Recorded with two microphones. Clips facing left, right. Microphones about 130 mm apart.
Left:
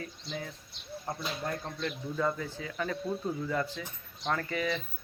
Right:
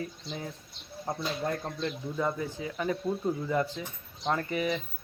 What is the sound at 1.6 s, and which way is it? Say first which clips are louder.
Speech: right 2 dB; 15° right (ahead or behind).